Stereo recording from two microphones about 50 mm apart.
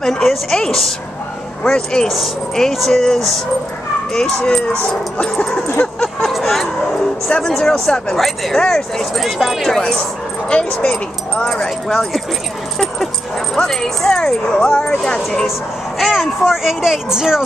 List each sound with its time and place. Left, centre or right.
0.5 s speech: centre
2.0 s speech: centre
4.4 s speech: left
5.9 s a sound: centre
7.4 s speech: centre
11.5 s speech: centre
13.6 s speech: centre
16.0 s speech: centre